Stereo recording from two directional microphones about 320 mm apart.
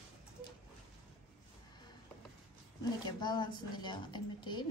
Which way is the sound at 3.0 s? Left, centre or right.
Centre.